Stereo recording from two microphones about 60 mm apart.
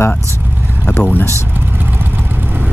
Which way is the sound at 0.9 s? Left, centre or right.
Left.